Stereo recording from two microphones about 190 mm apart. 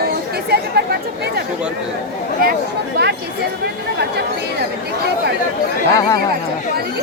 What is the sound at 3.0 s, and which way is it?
Speech, 60° right (ahead or behind).